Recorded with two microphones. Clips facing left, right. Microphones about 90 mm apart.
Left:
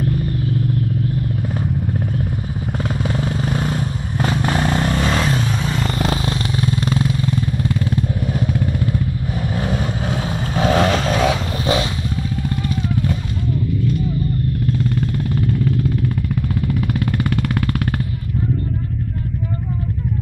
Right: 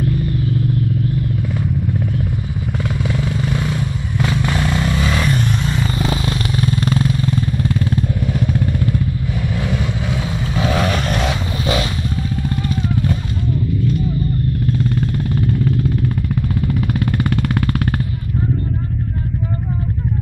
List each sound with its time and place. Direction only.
2.8 s vehicle: 35° left (ahead or behind)
5.2 s a sound: 85° left; by 6.1 s 60° left (ahead or behind)
6.5 s motorcycle: 15° left (ahead or behind)
9.6 s vehicle: 40° left (ahead or behind)
10.9 s vehicle: 80° left
11.6 s vehicle: 30° left (ahead or behind)
15.3 s vehicle: 5° right (ahead or behind)
16.6 s a sound: 5° right (ahead or behind)